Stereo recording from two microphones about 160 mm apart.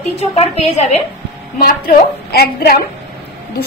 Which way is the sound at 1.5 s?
70° left (ahead or behind).